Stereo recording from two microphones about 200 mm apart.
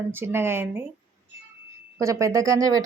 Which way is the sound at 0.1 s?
10° right (ahead or behind).